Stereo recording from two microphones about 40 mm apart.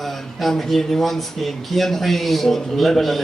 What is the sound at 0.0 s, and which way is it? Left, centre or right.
Speech, centre.